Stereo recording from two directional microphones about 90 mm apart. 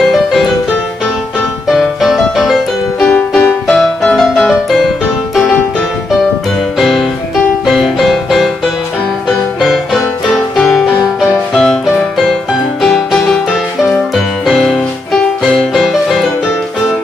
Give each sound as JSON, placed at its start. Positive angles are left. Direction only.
{"t": 0.1, "sound": "music", "side_deg": 0}
{"t": 1.7, "sound": "music", "side_deg": 0}
{"t": 3.2, "sound": "music", "side_deg": 15}
{"t": 4.6, "sound": "music", "side_deg": 0}
{"t": 6.8, "sound": "music", "side_deg": 0}
{"t": 9.6, "sound": "music", "side_deg": 0}
{"t": 12.8, "sound": "music", "side_deg": 0}